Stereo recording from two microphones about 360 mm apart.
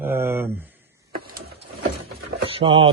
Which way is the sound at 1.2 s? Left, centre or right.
Right.